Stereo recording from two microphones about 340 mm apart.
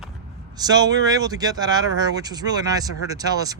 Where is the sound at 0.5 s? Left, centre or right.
Centre.